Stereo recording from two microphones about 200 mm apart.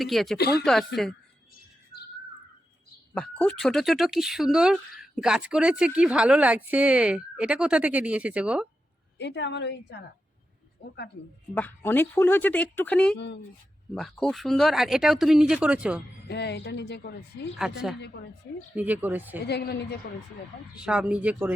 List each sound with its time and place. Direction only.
0.0 s speech: centre (ahead or behind)
0.3 s speech: 55° left (ahead or behind)
0.6 s speech: centre (ahead or behind)
3.2 s speech: 5° left (ahead or behind)
9.1 s speech: 60° left (ahead or behind)
11.5 s speech: 10° left (ahead or behind)
13.1 s speech: 60° left (ahead or behind)
13.9 s speech: centre (ahead or behind)
16.3 s speech: 55° left (ahead or behind)
18.8 s speech: 10° right (ahead or behind)
19.5 s speech: 55° left (ahead or behind)
20.8 s speech: 5° right (ahead or behind)